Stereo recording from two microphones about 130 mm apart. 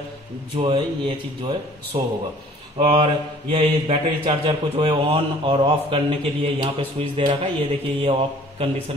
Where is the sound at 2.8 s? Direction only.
40° right (ahead or behind).